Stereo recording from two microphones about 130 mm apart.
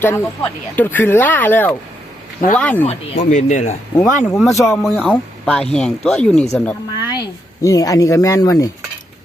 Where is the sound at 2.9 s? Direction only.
65° left (ahead or behind).